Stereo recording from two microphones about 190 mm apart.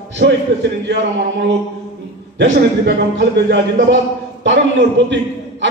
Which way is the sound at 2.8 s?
65° right (ahead or behind).